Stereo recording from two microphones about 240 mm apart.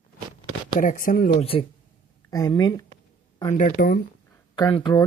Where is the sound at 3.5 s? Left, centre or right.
Left.